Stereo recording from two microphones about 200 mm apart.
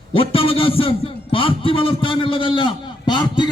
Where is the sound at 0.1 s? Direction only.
30° left (ahead or behind).